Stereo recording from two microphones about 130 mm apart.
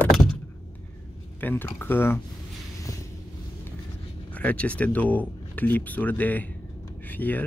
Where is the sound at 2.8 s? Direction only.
25° left (ahead or behind).